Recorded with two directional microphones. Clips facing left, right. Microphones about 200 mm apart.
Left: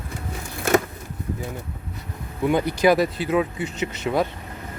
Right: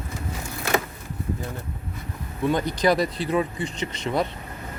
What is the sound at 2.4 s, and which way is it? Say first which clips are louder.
Speech: left 3 dB; 10° left (ahead or behind).